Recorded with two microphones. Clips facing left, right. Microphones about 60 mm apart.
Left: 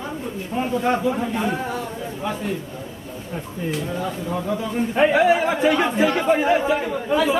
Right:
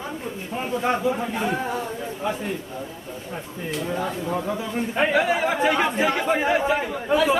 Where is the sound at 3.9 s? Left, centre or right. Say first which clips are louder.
Even; right.